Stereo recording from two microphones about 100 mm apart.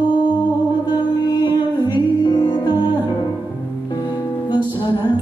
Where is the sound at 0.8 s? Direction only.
45° left (ahead or behind).